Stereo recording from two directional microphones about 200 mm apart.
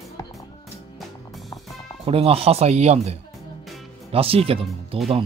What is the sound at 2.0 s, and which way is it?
Speech, 30° right (ahead or behind).